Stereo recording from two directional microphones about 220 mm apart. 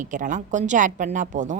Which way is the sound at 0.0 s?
35° right (ahead or behind).